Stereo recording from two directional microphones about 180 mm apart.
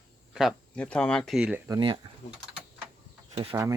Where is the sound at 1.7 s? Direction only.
25° right (ahead or behind).